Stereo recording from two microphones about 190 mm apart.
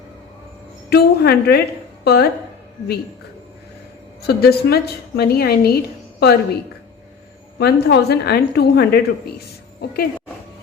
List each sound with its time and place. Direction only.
0.9 s a woman's voice: 55° left (ahead or behind)
4.2 s a woman's voice: 55° left (ahead or behind)
7.6 s a woman's voice: 60° left (ahead or behind)